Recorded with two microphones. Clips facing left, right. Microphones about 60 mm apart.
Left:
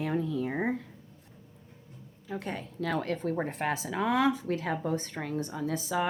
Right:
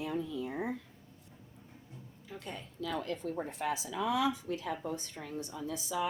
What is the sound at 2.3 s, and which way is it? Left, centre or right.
A woman's voice, left.